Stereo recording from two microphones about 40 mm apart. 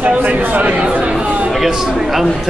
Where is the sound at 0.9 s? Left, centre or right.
Right.